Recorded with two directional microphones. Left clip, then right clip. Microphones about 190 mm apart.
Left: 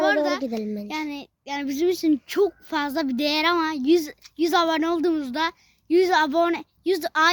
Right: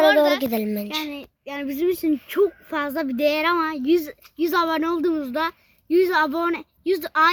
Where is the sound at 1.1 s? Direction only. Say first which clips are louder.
Left 1 dB; 45° left (ahead or behind).